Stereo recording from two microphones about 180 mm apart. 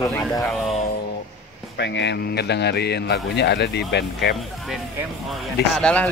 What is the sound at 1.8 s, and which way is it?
A man's voice, 75° left (ahead or behind).